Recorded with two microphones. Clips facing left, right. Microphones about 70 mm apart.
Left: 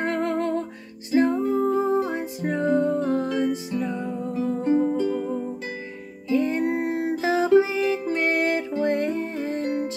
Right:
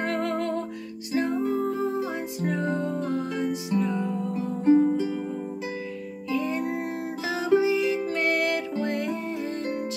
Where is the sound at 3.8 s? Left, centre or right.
Centre.